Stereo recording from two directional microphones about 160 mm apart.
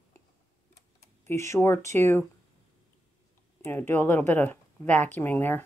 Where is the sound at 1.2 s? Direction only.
15° left (ahead or behind).